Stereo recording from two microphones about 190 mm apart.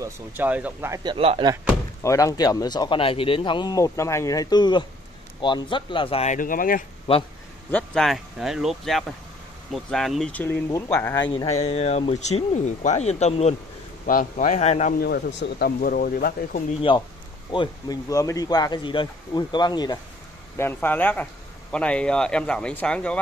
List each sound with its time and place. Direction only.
0.0 s speech: 10° right (ahead or behind)
1.1 s speech: 30° right (ahead or behind)
1.5 s speech: 10° right (ahead or behind)
2.0 s speech: 15° left (ahead or behind); by 6.8 s 45° left (ahead or behind)
7.7 s speech: centre (ahead or behind)
11.2 s speech: 30° left (ahead or behind)
15.0 s speech: 60° left (ahead or behind)
17.5 s speech: 20° left (ahead or behind)
20.5 s speech: 10° left (ahead or behind)